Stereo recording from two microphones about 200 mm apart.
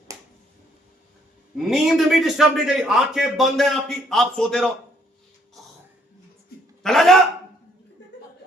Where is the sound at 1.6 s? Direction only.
Centre (ahead or behind).